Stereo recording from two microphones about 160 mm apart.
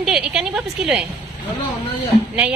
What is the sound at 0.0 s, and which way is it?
A woman's voice, 5° right (ahead or behind).